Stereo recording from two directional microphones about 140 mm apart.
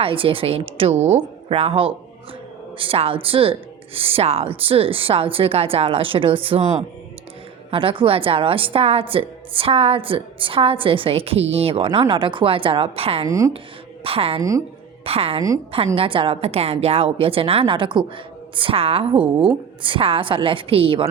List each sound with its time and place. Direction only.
0.0 s a woman's voice: 40° right (ahead or behind)
7.7 s a woman's voice: 40° right (ahead or behind)
13.2 s speech: 25° right (ahead or behind)
14.0 s a woman's voice: 40° right (ahead or behind)